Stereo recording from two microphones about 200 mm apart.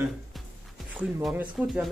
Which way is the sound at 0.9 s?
Centre (ahead or behind).